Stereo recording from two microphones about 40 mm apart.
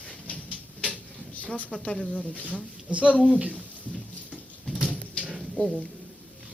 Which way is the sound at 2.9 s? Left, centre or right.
Right.